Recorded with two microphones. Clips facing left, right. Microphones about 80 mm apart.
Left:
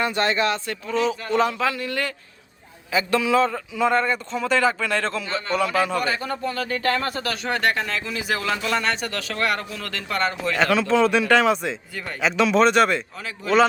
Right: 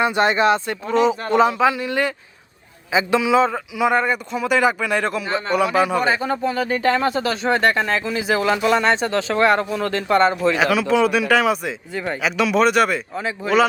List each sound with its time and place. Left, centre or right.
0.0 s a man's voice: centre
10.5 s speech: centre
13.1 s a man's voice: right